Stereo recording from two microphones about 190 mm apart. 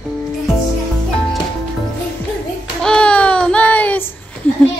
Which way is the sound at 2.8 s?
5° left (ahead or behind).